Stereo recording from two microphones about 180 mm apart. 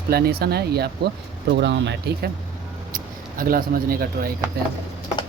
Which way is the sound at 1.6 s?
75° right (ahead or behind).